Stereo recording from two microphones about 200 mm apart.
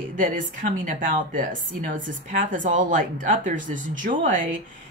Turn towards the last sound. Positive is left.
turn(degrees=-40)  # may be behind; listen again after turning